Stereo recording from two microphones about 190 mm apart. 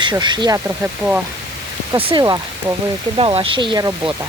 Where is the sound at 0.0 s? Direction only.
25° right (ahead or behind).